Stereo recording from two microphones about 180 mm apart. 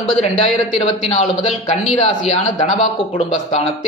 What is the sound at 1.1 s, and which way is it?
Speech, 35° left (ahead or behind).